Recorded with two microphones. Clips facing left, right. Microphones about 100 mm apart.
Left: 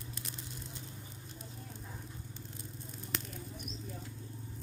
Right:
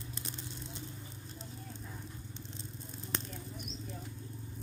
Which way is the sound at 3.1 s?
35° right (ahead or behind).